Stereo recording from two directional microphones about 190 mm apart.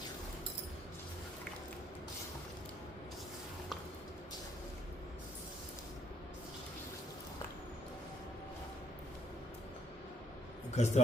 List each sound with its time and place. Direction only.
10.8 s a man's voice: 35° left (ahead or behind)